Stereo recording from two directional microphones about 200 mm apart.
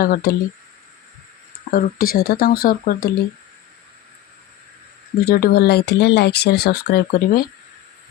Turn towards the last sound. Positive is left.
turn(degrees=50)  # may be behind; listen again after turning